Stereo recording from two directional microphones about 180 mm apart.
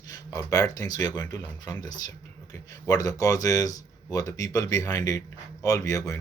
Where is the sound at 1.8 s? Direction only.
20° left (ahead or behind).